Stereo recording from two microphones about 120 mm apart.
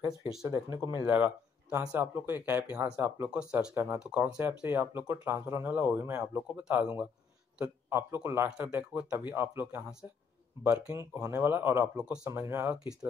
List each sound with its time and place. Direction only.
0.4 s speech: 25° right (ahead or behind)
1.0 s speech: 15° right (ahead or behind)
3.7 s a man's voice: 20° right (ahead or behind)
8.5 s speech: 10° right (ahead or behind)